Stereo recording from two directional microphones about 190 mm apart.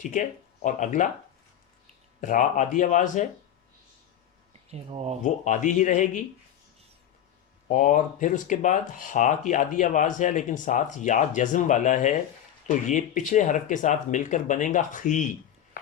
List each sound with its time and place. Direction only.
0.0 s speech: 40° left (ahead or behind)
2.2 s speech: 40° left (ahead or behind)
4.7 s speech: 35° right (ahead or behind)
5.2 s speech: 40° left (ahead or behind)
7.7 s speech: 45° left (ahead or behind)